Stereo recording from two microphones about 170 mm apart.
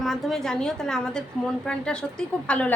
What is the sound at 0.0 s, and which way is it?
A woman's voice, centre (ahead or behind).